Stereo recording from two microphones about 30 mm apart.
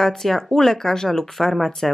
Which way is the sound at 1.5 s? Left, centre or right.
Centre.